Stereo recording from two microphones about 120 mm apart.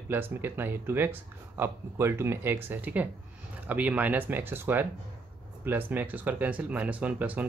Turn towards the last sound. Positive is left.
turn(degrees=-15)  # may be behind; listen again after turning